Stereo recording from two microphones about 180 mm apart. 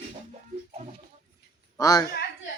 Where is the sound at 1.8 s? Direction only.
20° left (ahead or behind).